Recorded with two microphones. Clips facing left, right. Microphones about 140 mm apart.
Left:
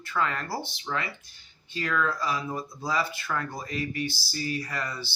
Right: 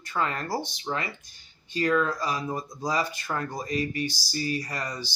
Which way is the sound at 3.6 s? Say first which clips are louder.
Right 3 dB; 40° right (ahead or behind).